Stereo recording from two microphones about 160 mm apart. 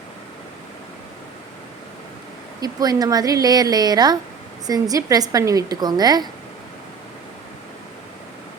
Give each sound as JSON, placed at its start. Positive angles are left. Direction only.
{"t": 2.6, "sound": "a woman's voice", "side_deg": -25}